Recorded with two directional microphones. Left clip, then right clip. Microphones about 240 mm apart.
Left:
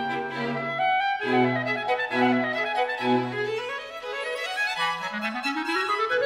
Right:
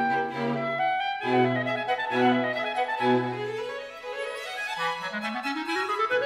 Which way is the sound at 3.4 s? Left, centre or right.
Left.